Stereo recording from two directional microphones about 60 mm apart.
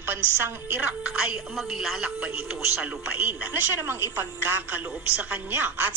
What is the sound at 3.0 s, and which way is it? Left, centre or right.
A woman's voice, right.